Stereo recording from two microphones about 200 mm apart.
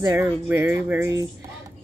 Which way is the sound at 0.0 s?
15° right (ahead or behind).